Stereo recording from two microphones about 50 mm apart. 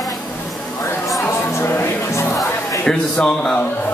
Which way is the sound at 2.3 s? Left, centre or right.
Left.